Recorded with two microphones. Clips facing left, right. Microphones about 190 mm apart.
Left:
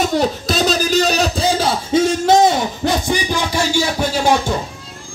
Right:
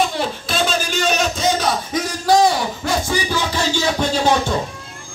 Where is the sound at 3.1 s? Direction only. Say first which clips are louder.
Left 2 dB; 15° left (ahead or behind).